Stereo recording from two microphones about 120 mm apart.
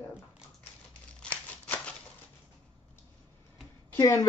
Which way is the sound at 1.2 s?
10° left (ahead or behind).